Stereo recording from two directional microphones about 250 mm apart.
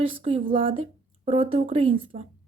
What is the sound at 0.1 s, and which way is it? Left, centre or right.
A woman's voice, right.